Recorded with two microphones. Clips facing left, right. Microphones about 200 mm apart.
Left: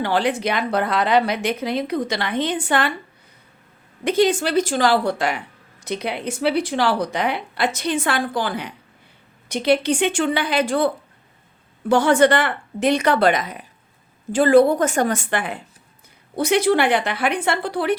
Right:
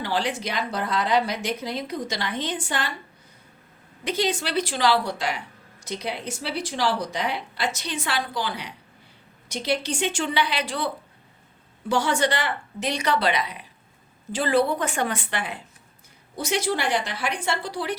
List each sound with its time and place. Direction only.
0.0 s speech: 55° left (ahead or behind)
4.0 s a woman's voice: 50° left (ahead or behind)